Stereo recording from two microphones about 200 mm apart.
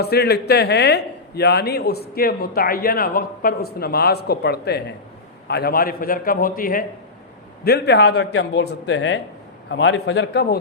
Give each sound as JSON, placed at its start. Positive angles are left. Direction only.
{"t": 0.0, "sound": "a man's voice", "side_deg": 55}